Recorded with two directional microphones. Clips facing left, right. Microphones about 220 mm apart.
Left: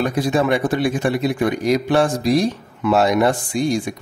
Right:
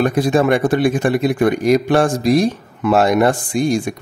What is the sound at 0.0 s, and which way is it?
Speech, 50° right (ahead or behind).